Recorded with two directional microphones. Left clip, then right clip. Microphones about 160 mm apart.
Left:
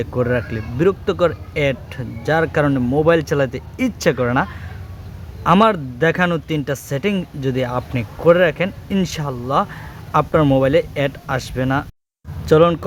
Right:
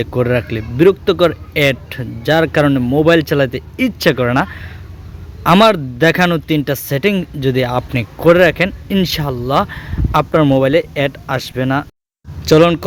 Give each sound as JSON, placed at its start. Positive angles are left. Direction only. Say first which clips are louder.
{"t": 0.0, "sound": "a man's voice", "louder": "right 4 dB", "side_deg": -25}